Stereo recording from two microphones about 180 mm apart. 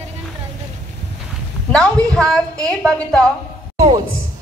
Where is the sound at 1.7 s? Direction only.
5° left (ahead or behind).